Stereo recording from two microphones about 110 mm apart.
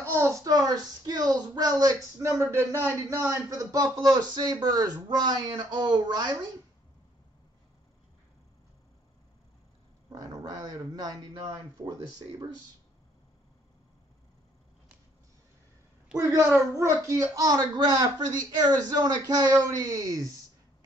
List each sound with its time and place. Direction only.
0.2 s speech: 30° right (ahead or behind)
3.4 s speech: 30° right (ahead or behind)
10.0 s speech: 35° right (ahead or behind)
16.2 s a woman's voice: 30° right (ahead or behind)